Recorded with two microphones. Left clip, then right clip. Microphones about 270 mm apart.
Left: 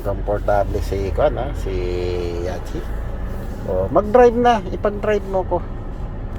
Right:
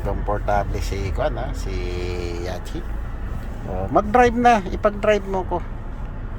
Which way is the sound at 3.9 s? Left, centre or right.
Centre.